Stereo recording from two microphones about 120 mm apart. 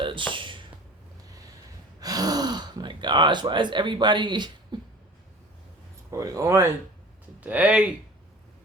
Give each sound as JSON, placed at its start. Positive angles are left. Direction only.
{"t": 0.0, "sound": "a sound", "side_deg": -45}
{"t": 2.0, "sound": "gasp", "side_deg": -30}
{"t": 6.1, "sound": "speech", "side_deg": -25}
{"t": 7.4, "sound": "speech", "side_deg": -10}